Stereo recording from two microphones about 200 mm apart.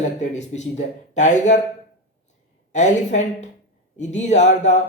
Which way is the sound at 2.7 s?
35° left (ahead or behind).